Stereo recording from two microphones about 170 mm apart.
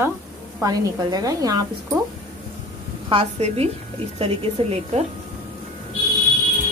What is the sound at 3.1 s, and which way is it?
Speech, 35° right (ahead or behind).